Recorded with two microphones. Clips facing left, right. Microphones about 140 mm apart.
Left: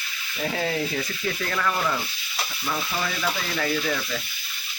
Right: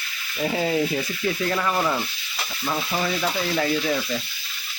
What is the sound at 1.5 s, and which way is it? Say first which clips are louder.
Speech: left 1 dB; 25° right (ahead or behind).